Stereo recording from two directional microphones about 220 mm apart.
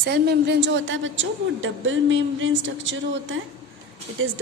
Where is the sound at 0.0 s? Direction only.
50° right (ahead or behind).